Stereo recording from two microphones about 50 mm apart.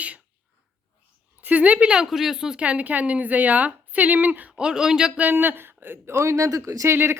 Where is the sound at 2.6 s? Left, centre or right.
Right.